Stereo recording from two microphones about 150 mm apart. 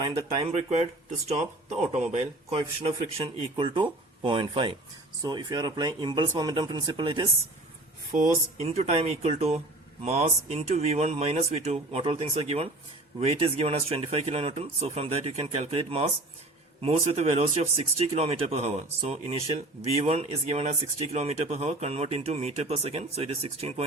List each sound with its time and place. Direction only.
0.3 s speech: 45° right (ahead or behind)
8.6 s speech: 45° right (ahead or behind)